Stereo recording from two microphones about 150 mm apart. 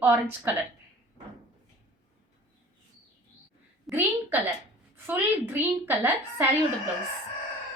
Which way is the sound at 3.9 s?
10° right (ahead or behind).